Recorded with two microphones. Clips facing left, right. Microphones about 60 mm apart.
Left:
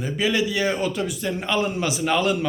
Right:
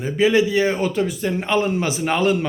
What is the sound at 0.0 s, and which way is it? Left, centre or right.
A man's voice, right.